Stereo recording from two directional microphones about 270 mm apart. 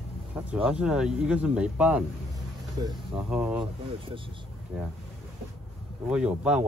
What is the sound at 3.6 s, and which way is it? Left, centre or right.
Speech, centre.